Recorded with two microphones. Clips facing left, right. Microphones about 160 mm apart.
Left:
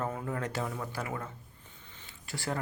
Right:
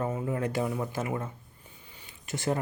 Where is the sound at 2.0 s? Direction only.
20° right (ahead or behind).